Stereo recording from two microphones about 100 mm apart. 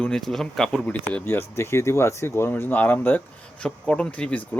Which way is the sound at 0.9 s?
15° left (ahead or behind).